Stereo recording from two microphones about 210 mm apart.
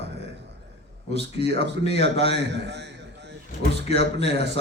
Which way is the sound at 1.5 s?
55° right (ahead or behind).